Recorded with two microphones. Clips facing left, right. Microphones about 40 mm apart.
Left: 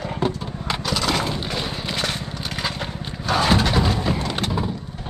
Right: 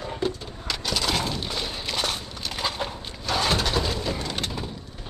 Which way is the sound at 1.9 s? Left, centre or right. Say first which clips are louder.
Left 3 dB; left.